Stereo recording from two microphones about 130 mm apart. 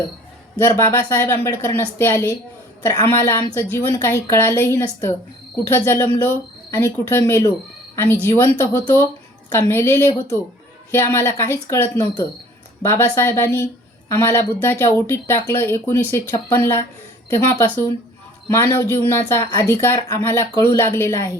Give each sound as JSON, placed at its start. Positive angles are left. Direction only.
{"t": 0.6, "sound": "a woman's voice", "side_deg": 20}